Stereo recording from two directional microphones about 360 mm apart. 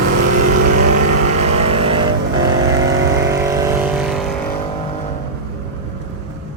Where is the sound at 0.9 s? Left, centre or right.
Right.